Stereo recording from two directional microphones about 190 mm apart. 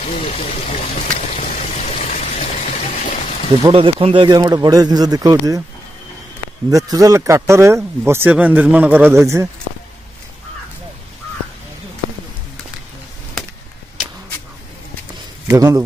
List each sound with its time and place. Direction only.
0.0 s speech: 35° left (ahead or behind)
1.4 s water: 40° left (ahead or behind)
3.7 s speech: 30° right (ahead or behind)
6.7 s speech: 20° right (ahead or behind)
15.4 s speech: 15° right (ahead or behind)